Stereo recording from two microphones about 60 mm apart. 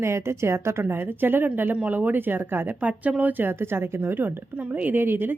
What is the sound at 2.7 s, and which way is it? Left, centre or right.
A woman's voice, right.